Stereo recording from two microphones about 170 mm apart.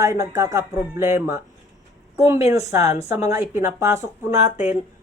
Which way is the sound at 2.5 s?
20° right (ahead or behind).